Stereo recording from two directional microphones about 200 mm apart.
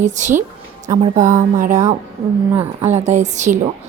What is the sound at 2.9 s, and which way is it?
Speech, 35° right (ahead or behind).